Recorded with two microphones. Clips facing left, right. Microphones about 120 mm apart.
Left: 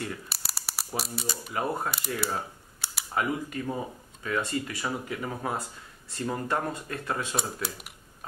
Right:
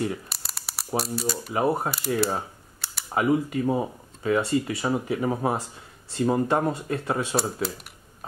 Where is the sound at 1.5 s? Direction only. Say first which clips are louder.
Right 6 dB; 25° right (ahead or behind).